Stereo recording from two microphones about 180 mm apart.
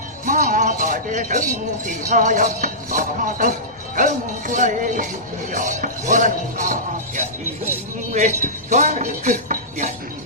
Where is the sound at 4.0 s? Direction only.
45° right (ahead or behind).